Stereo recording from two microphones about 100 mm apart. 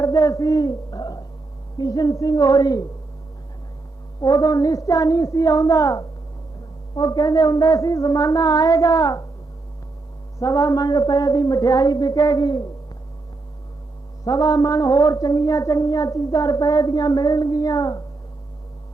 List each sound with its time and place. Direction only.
0.0 s a woman's voice: 35° left (ahead or behind)
4.2 s a woman's voice: 40° left (ahead or behind)
10.4 s a woman's voice: 35° left (ahead or behind)
14.3 s a woman's voice: 40° left (ahead or behind)